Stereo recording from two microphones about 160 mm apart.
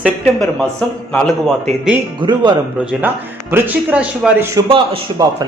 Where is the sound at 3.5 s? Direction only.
10° right (ahead or behind).